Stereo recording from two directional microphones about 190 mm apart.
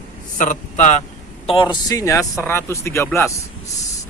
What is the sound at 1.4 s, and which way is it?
A man's voice, 30° left (ahead or behind).